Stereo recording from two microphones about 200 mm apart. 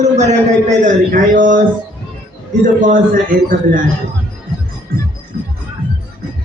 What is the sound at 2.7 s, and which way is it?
A man's voice, 40° right (ahead or behind).